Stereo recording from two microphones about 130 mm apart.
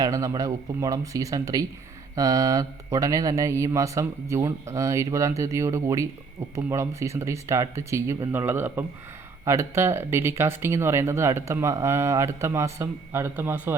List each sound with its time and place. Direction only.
0.0 s speech: 25° right (ahead or behind)